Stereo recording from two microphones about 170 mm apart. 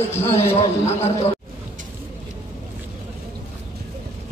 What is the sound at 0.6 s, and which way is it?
Speech, 40° left (ahead or behind).